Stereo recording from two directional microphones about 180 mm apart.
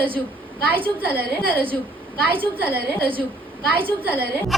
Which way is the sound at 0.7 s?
10° right (ahead or behind).